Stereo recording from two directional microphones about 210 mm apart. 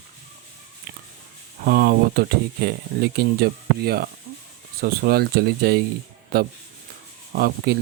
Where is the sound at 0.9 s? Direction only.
50° right (ahead or behind).